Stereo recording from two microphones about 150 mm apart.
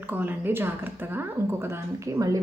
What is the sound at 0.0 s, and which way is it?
A woman's voice, 10° right (ahead or behind).